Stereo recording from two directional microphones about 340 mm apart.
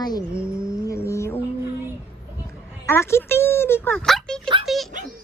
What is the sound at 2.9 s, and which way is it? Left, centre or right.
Speech, centre.